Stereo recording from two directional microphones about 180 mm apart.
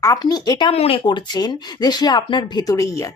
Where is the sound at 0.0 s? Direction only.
20° left (ahead or behind).